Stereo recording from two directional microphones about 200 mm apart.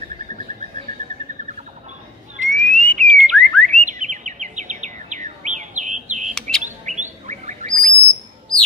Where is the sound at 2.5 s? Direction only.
5° left (ahead or behind).